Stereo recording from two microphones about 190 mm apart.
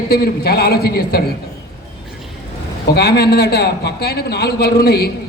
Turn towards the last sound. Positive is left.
turn(degrees=55)  # may be behind; listen again after turning